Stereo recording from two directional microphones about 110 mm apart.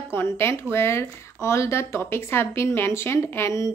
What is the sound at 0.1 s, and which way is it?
Speech, 20° left (ahead or behind).